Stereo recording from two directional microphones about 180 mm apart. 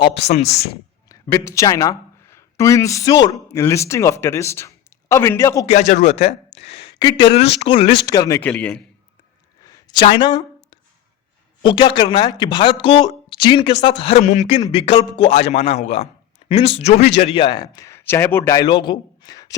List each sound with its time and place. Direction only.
0.3 s a man's voice: 35° left (ahead or behind)
1.0 s speech: 20° left (ahead or behind)
5.6 s a woman's voice: 40° left (ahead or behind); by 8.4 s 20° left (ahead or behind)
8.4 s a man's voice: 5° left (ahead or behind)
9.6 s a sound: 20° left (ahead or behind)
11.6 s a woman's voice: 25° left (ahead or behind)